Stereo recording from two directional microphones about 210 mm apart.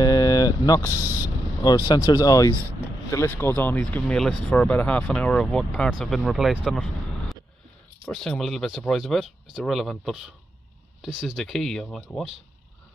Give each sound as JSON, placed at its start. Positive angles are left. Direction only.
{"t": 0.0, "sound": "a sound", "side_deg": 20}
{"t": 1.0, "sound": "speech", "side_deg": -10}
{"t": 2.0, "sound": "speech", "side_deg": 15}